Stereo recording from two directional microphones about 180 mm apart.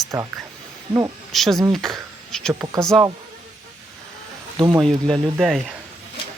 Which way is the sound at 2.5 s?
20° right (ahead or behind).